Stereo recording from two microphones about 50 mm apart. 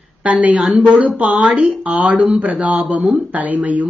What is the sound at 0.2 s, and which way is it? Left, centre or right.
A woman's voice, right.